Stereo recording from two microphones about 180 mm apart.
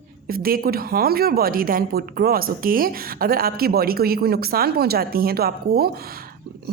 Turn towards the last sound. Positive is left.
turn(degrees=-60)  # may be behind; listen again after turning